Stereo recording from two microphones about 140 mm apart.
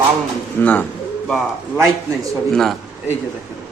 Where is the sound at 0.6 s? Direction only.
10° left (ahead or behind).